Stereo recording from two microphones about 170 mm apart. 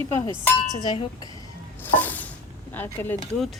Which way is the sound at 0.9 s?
25° left (ahead or behind).